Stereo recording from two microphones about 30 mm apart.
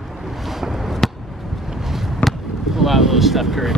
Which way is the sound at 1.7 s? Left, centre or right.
Centre.